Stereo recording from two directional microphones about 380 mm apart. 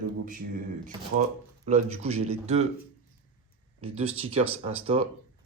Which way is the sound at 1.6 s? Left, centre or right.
Centre.